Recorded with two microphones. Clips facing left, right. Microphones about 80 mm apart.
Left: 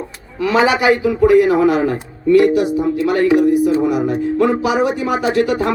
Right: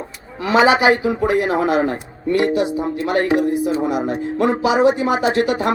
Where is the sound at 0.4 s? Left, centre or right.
Right.